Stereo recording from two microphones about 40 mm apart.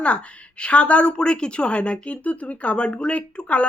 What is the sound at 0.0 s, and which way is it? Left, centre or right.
A woman's voice, left.